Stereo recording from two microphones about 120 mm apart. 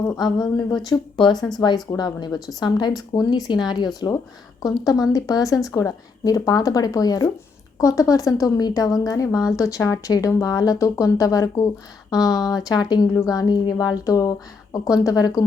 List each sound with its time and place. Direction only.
0.1 s a woman's voice: 35° left (ahead or behind)